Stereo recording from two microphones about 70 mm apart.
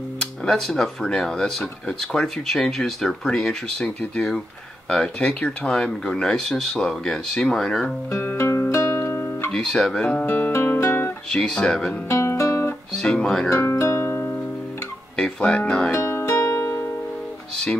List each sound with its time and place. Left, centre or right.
0.5 s speech: centre
5.7 s speech: centre
8.2 s music: left
9.5 s speech: centre
10.2 s guitar: left
11.2 s speech: centre
12.1 s music: left
13.0 s speech: centre
13.5 s music: left
15.1 s music: centre
15.9 s music: left